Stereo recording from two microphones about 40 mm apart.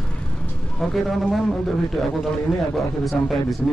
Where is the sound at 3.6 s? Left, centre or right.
Left.